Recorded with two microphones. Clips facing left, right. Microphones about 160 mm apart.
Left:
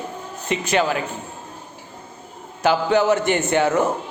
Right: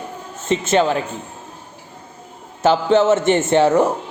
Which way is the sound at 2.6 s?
25° right (ahead or behind).